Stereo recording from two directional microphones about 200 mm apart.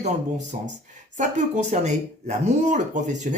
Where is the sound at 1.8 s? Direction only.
35° right (ahead or behind).